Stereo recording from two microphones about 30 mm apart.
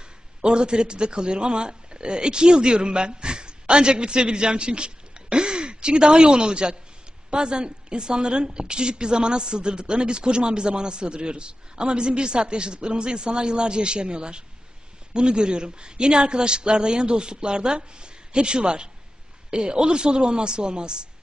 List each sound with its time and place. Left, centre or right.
0.4 s a man's voice: right